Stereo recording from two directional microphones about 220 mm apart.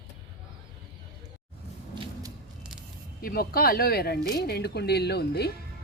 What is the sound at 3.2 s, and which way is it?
A woman's voice, 45° left (ahead or behind).